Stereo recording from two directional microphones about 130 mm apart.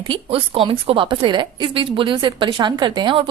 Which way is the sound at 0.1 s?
45° right (ahead or behind).